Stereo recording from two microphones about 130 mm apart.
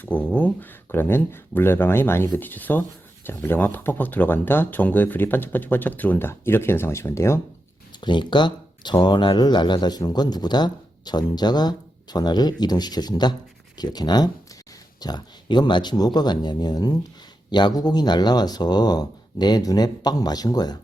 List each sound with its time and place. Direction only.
0.0 s speech: 10° left (ahead or behind)
8.0 s speech: 35° left (ahead or behind)